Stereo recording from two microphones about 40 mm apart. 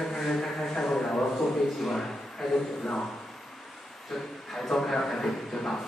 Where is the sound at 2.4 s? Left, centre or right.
Centre.